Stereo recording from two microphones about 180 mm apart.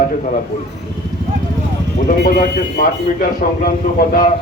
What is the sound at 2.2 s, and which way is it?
A man's voice, 60° left (ahead or behind).